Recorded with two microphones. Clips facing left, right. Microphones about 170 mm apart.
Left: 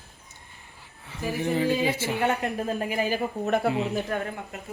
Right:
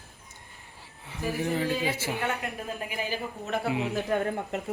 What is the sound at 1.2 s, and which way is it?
Speech, centre (ahead or behind).